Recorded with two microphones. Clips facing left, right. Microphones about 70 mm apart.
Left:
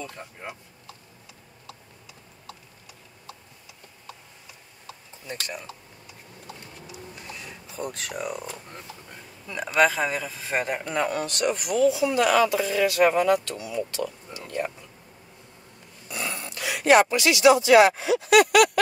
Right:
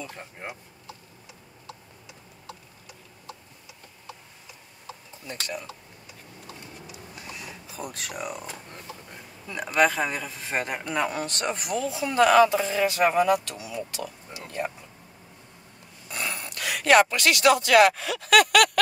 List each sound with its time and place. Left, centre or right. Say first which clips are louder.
6.9 s a sound: left 3 dB; centre
8.2 s a man's voice: left 3 dB; centre
9.5 s a man's voice: left 1 dB; centre
11.0 s speech: left 1 dB; right
11.3 s speech: left 4 dB; right; by 14.7 s centre
16.1 s a sound: even; right
16.4 s speech: left 2 dB; right